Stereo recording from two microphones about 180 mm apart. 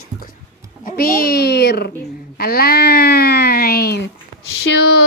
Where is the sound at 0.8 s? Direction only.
55° left (ahead or behind).